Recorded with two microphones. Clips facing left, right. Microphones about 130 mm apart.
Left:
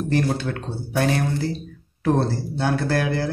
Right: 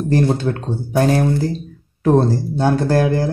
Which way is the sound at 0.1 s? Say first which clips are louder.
Right 6 dB; 35° right (ahead or behind).